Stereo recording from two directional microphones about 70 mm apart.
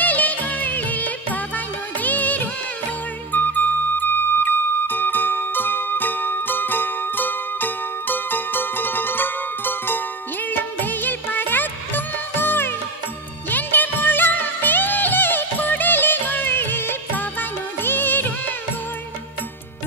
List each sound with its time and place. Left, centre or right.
0.0 s music: left